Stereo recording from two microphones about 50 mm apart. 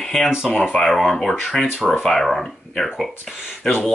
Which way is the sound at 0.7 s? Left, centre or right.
Centre.